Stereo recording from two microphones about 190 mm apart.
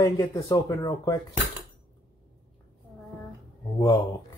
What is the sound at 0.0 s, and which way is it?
Speech, 15° left (ahead or behind).